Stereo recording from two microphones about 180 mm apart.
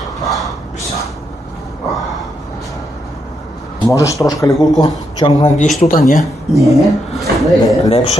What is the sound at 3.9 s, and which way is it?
Speech, 15° left (ahead or behind).